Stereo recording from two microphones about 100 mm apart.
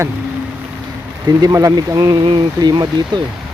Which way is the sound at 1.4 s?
35° right (ahead or behind).